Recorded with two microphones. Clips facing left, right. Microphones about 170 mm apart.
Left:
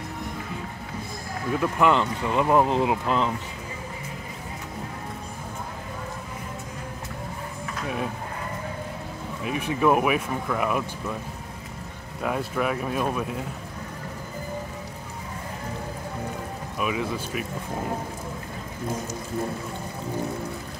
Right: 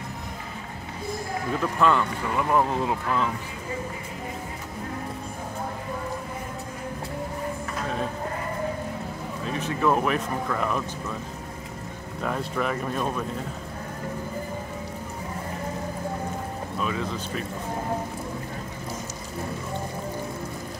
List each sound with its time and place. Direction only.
1.6 s speech: 15° left (ahead or behind)
9.4 s speech: 10° left (ahead or behind)
12.2 s speech: 5° left (ahead or behind)
16.7 s speech: 10° left (ahead or behind)